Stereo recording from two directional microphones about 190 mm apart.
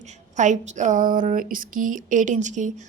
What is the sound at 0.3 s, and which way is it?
A woman's voice, 40° right (ahead or behind).